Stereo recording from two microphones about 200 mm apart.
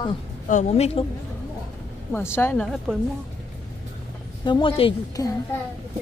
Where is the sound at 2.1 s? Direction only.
10° left (ahead or behind).